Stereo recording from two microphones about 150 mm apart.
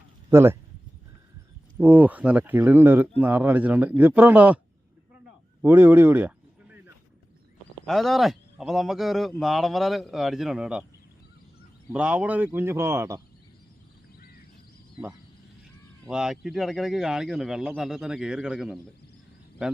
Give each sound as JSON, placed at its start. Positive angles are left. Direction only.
{"t": 0.3, "sound": "speech", "side_deg": -15}
{"t": 1.8, "sound": "a man's voice", "side_deg": -10}
{"t": 5.6, "sound": "speech", "side_deg": -15}
{"t": 7.9, "sound": "speech", "side_deg": 0}
{"t": 11.9, "sound": "a man's voice", "side_deg": -5}
{"t": 14.2, "sound": "a sound", "side_deg": 90}
{"t": 16.0, "sound": "speech", "side_deg": -5}